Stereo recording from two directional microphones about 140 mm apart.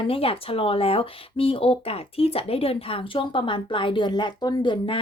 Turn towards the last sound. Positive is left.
turn(degrees=35)  # may be behind; listen again after turning